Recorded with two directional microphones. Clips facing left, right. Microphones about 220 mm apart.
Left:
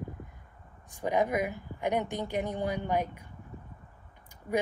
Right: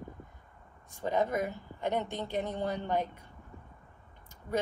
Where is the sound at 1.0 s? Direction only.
15° left (ahead or behind).